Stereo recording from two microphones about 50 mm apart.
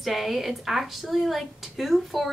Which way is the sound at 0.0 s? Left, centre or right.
Centre.